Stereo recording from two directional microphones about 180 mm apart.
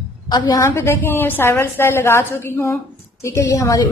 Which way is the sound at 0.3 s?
20° left (ahead or behind).